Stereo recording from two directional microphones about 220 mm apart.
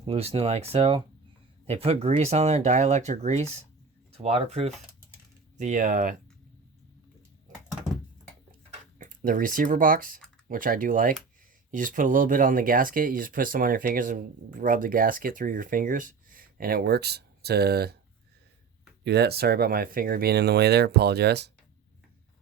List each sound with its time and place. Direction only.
0.0 s speech: 25° right (ahead or behind)
9.0 s speech: 35° right (ahead or behind)
19.0 s speech: 50° right (ahead or behind)